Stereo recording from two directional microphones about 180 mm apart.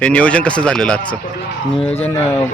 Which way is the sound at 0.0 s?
5° left (ahead or behind).